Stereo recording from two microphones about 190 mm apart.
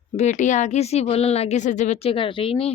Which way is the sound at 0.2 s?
40° left (ahead or behind).